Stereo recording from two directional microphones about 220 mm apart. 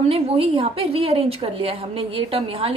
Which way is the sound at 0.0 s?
25° right (ahead or behind).